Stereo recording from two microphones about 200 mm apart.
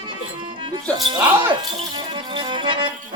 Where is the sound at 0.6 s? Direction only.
25° right (ahead or behind).